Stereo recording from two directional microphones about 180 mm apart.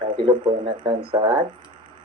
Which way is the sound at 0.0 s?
25° right (ahead or behind).